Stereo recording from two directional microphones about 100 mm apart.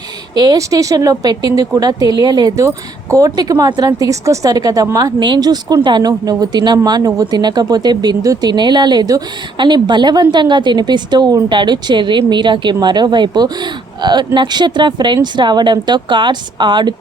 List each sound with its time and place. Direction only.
0.3 s speech: 40° right (ahead or behind)
5.2 s speech: 45° right (ahead or behind)